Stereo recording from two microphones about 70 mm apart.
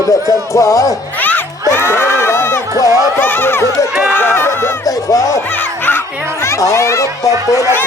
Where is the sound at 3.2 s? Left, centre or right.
Left.